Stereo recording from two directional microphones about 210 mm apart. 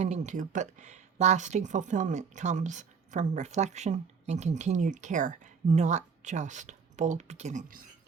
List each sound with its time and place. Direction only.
0.0 s speech: 35° right (ahead or behind)